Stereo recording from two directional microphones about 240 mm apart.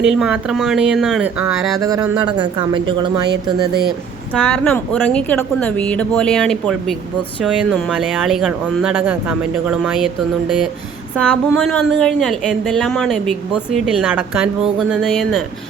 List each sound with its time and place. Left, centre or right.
0.0 s speech: centre
1.8 s speech: centre
4.4 s speech: centre
11.2 s speech: centre